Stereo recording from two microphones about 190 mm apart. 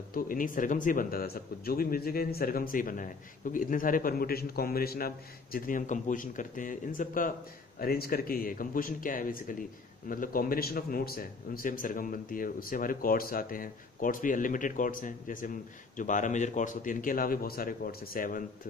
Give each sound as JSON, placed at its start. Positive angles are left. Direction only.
{"t": 0.1, "sound": "speech", "side_deg": 45}